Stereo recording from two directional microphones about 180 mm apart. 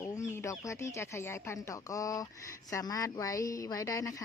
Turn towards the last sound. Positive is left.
turn(degrees=20)  # may be behind; listen again after turning